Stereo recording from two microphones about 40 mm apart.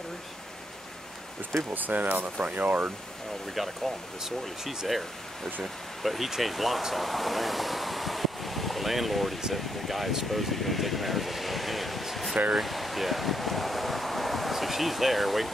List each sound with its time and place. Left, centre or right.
1.7 s speech: right
4.2 s speech: centre
6.0 s speech: centre